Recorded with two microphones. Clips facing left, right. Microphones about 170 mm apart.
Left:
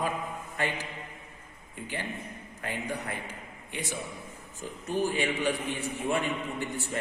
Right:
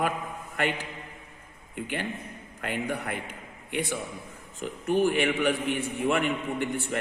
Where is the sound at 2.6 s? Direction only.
65° right (ahead or behind).